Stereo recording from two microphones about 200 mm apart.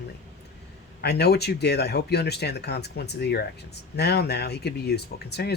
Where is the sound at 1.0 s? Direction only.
55° left (ahead or behind).